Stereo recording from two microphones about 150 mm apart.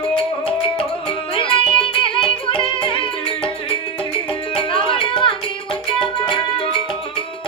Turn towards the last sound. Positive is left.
turn(degrees=35)  # may be behind; listen again after turning